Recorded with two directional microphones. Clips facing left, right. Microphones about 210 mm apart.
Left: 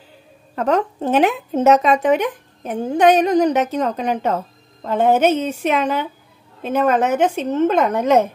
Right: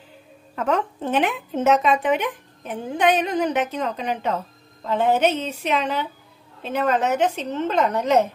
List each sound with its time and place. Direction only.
0.6 s a woman's voice: 40° left (ahead or behind)